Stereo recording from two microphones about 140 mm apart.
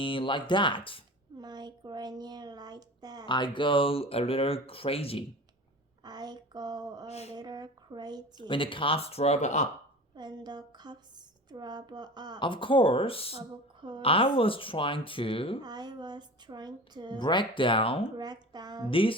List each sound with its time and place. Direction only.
0.0 s speech: 40° left (ahead or behind)
1.4 s speech: 30° right (ahead or behind)
3.2 s speech: 35° left (ahead or behind)
6.0 s speech: 30° right (ahead or behind)
8.4 s speech: 35° left (ahead or behind); by 9.6 s 55° left (ahead or behind)
10.2 s a woman's voice: 30° right (ahead or behind)
12.4 s speech: 35° left (ahead or behind)
15.6 s a woman's voice: 30° right (ahead or behind)
17.2 s speech: 35° left (ahead or behind)
18.2 s speech: 30° right (ahead or behind)
18.9 s speech: 40° left (ahead or behind)